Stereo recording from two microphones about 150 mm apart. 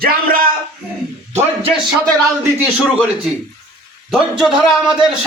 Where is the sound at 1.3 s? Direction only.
45° right (ahead or behind).